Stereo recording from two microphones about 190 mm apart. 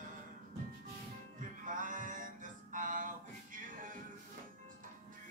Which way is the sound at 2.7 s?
45° right (ahead or behind).